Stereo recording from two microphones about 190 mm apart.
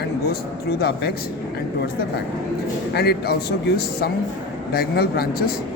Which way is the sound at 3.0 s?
55° left (ahead or behind).